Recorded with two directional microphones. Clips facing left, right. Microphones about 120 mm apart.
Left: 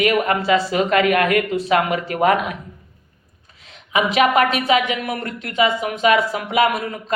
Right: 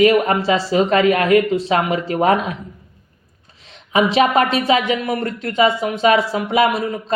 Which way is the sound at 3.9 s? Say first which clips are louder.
Right 2 dB; 35° right (ahead or behind).